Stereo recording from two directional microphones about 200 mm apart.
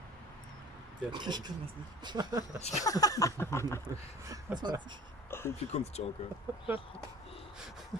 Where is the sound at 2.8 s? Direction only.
20° left (ahead or behind).